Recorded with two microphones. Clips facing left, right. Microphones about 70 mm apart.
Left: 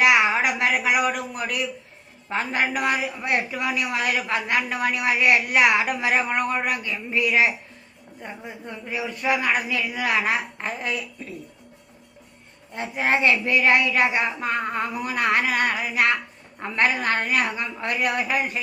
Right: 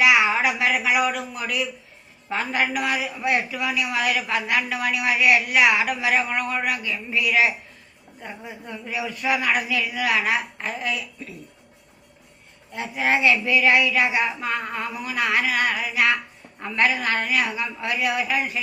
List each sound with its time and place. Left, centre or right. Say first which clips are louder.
0.0 s a sound: even; left
2.3 s a woman's voice: even; left
12.7 s a woman's voice: even; left